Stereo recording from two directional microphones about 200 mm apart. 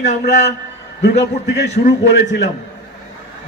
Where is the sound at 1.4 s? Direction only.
60° left (ahead or behind).